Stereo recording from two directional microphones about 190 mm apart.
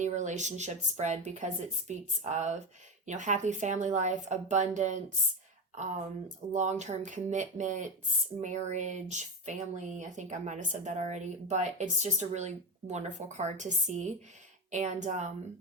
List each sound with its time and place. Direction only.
0.0 s speech: 40° right (ahead or behind)